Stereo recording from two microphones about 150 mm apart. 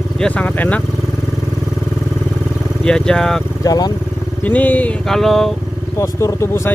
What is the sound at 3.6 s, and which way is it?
Speech, 25° left (ahead or behind).